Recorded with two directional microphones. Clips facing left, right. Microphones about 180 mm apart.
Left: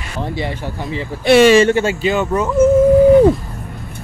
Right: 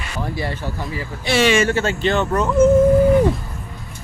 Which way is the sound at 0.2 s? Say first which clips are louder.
Left 3 dB; 20° left (ahead or behind).